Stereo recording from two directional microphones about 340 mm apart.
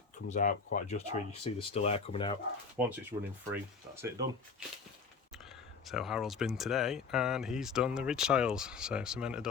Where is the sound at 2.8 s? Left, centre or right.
Centre.